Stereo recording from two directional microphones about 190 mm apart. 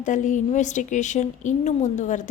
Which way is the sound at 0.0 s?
40° left (ahead or behind).